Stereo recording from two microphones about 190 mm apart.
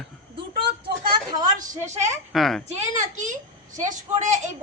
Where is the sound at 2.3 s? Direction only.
Centre (ahead or behind).